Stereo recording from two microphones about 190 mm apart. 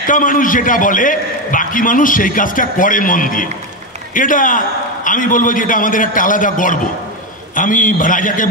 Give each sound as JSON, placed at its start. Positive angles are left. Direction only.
{"t": 0.0, "sound": "a man's voice", "side_deg": 45}